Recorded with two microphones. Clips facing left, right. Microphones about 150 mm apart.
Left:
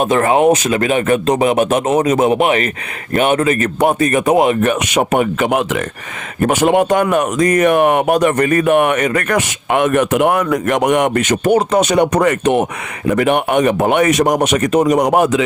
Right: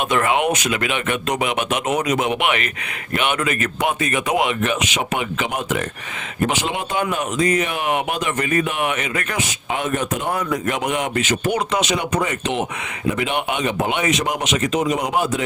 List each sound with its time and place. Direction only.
0.0 s a man's voice: 35° left (ahead or behind)
9.3 s a man's voice: 70° left (ahead or behind)
13.1 s speech: 60° left (ahead or behind)
15.1 s a man's voice: 80° left